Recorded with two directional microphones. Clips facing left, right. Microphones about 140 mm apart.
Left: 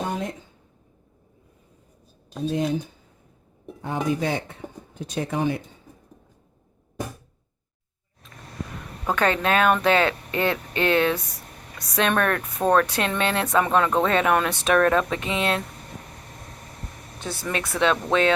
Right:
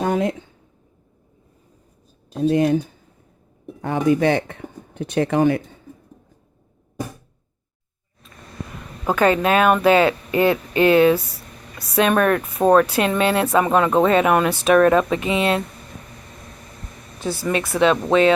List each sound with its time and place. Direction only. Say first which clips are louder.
0.0 s a sound: right 8 dB; 80° right
2.4 s speech: right 7 dB; 65° right (ahead or behind)
3.8 s speech: right 7 dB; 70° right (ahead or behind)
9.0 s speech: right 5 dB; 5° right (ahead or behind)
17.2 s speech: right 6 dB; centre (ahead or behind)